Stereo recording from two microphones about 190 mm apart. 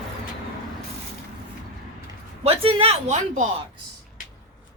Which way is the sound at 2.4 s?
30° right (ahead or behind).